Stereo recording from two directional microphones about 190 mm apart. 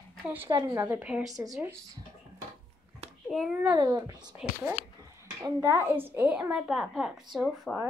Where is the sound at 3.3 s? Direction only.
Centre (ahead or behind).